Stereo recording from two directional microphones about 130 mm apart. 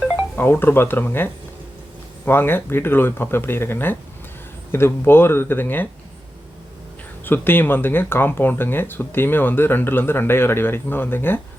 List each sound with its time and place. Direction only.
0.3 s speech: 15° left (ahead or behind)
7.3 s speech: 15° left (ahead or behind)